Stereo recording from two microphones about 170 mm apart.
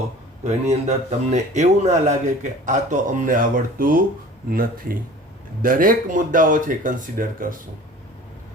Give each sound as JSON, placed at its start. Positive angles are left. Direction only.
{"t": 0.4, "sound": "speech", "side_deg": -40}